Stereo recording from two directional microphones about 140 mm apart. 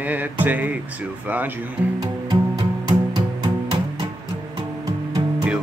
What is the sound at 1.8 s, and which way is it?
Music, 15° right (ahead or behind).